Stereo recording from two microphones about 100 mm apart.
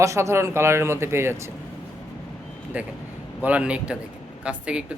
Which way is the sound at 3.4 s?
15° right (ahead or behind).